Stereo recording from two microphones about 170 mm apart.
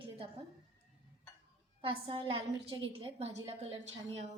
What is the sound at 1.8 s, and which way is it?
A woman's voice, 30° right (ahead or behind).